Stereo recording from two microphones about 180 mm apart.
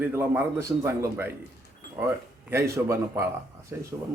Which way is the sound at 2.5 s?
15° right (ahead or behind).